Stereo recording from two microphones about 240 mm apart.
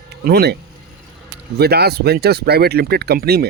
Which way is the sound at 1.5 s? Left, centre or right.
Right.